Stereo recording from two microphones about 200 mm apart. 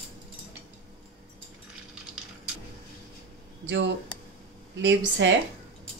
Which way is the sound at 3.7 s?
65° right (ahead or behind).